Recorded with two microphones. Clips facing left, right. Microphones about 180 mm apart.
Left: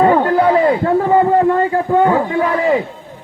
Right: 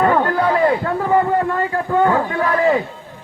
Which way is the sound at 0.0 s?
20° left (ahead or behind).